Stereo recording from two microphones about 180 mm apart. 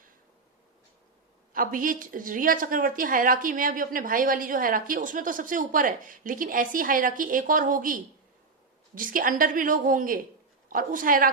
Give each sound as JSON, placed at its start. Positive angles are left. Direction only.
{"t": 1.5, "sound": "a woman's voice", "side_deg": -50}
{"t": 9.0, "sound": "a woman's voice", "side_deg": -50}